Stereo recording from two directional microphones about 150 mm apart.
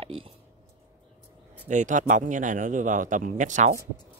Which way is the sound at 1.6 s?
55° right (ahead or behind).